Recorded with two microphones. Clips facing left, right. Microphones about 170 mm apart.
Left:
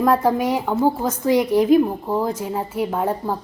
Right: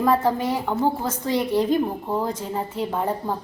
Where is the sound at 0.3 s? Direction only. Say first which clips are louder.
Left 3 dB; 15° left (ahead or behind).